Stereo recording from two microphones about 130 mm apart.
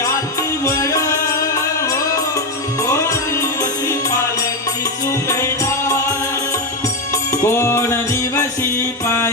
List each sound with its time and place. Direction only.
0.6 s music: 25° left (ahead or behind)
7.4 s music: 20° left (ahead or behind)